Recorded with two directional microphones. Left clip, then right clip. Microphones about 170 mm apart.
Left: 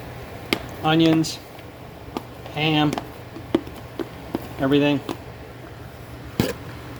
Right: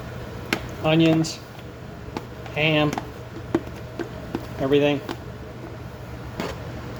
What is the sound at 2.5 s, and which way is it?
Speech, 55° left (ahead or behind).